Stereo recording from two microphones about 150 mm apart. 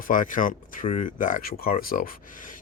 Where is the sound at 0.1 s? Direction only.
60° left (ahead or behind).